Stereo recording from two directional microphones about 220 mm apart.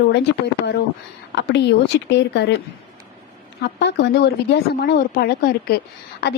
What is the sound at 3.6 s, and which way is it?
A woman's voice, 50° left (ahead or behind).